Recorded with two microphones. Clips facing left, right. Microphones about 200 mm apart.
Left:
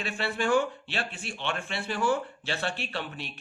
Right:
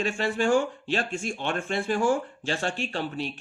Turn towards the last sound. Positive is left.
turn(degrees=-40)  # may be behind; listen again after turning